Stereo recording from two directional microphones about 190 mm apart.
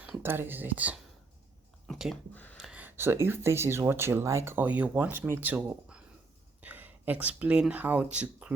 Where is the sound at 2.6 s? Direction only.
5° right (ahead or behind).